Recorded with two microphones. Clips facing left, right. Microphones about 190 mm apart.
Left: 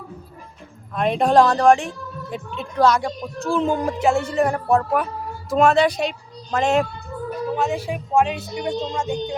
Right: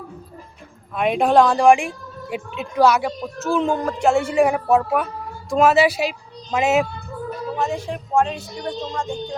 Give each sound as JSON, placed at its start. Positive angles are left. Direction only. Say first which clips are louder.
{"t": 0.9, "sound": "speech", "louder": "even", "side_deg": -5}
{"t": 4.1, "sound": "a woman's voice", "louder": "right 5 dB", "side_deg": -10}
{"t": 8.8, "sound": "music", "louder": "left 2 dB", "side_deg": 20}